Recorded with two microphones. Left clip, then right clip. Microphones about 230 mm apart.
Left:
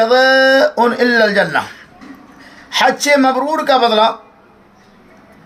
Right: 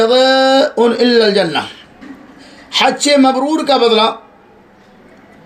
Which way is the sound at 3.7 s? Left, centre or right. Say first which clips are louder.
Even; left.